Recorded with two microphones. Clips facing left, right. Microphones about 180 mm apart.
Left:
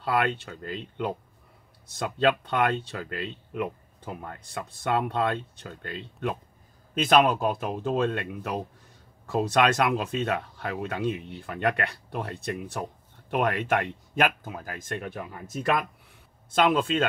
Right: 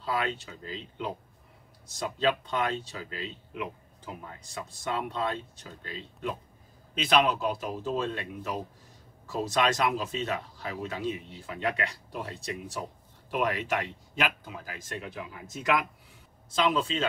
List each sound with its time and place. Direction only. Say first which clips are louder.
0.0 s speech: left 5 dB; 60° left (ahead or behind)
16.4 s speech: left 4 dB; 55° left (ahead or behind)